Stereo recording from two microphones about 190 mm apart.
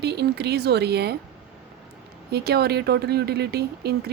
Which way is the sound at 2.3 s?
55° right (ahead or behind).